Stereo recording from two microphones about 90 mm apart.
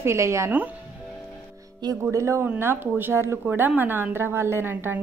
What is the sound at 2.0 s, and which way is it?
A woman's voice, 30° right (ahead or behind).